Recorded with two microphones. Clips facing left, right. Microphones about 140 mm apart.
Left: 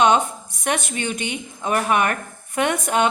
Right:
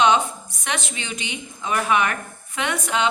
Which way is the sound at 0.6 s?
50° left (ahead or behind).